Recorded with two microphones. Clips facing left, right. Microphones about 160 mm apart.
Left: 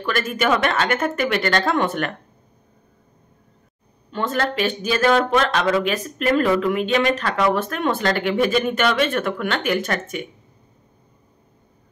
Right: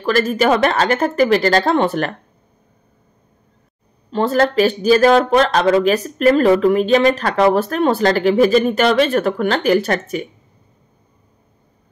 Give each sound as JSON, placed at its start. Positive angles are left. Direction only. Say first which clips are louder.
{"t": 0.0, "sound": "speech", "louder": "right 6 dB", "side_deg": -35}
{"t": 4.1, "sound": "speech", "louder": "right 7 dB", "side_deg": -35}